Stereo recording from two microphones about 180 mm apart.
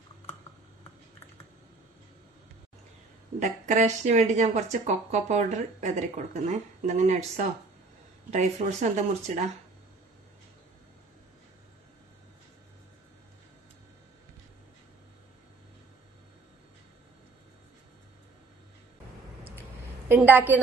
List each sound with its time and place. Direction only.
3.4 s speech: 40° right (ahead or behind)
20.1 s a woman's voice: 10° right (ahead or behind)